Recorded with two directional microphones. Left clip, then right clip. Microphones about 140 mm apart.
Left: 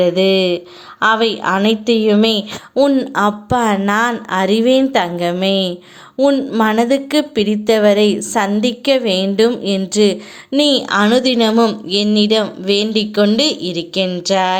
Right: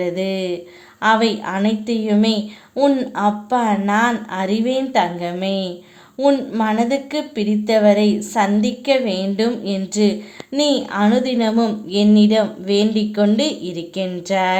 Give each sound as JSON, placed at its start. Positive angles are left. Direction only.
{"t": 0.0, "sound": "a woman's voice", "side_deg": 25}